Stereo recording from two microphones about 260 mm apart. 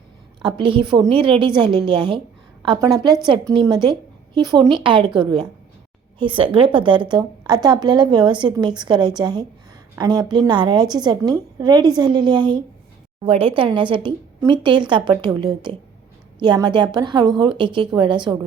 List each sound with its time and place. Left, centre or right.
0.4 s a woman's voice: centre
16.4 s a woman's voice: centre